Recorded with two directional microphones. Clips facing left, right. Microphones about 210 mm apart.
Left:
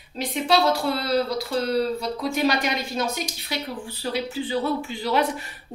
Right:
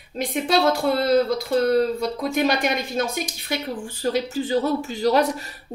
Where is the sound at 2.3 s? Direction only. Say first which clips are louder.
Right 1 dB; 50° right (ahead or behind).